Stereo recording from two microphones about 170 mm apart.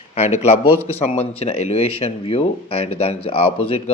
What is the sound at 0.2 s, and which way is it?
Speech, 40° left (ahead or behind).